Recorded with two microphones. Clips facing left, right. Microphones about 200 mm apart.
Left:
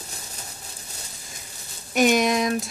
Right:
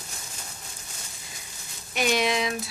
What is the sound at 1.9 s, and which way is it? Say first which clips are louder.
Speech: left 5 dB; 45° left (ahead or behind).